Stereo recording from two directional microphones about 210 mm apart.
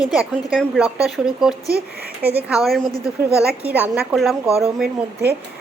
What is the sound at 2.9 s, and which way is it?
Speech, 15° left (ahead or behind).